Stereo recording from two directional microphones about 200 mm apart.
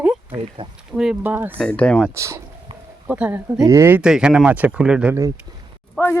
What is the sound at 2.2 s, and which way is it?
Speech, 15° right (ahead or behind).